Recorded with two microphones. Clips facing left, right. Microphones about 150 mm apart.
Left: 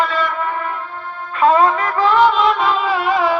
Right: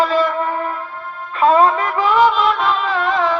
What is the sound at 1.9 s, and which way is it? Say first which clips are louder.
Music: left 1 dB; 15° right (ahead or behind).